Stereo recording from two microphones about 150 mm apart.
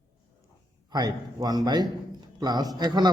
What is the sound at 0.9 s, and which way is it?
A man's voice, 25° right (ahead or behind).